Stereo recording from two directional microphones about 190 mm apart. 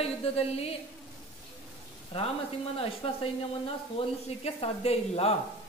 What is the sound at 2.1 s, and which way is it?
A man's voice, 30° left (ahead or behind).